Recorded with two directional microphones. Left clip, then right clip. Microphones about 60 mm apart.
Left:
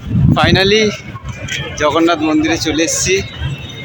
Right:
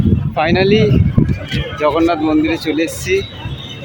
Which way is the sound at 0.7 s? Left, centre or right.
Centre.